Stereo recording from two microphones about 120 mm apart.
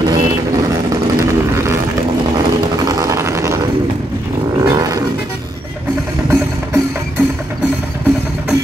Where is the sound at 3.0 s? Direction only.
25° right (ahead or behind).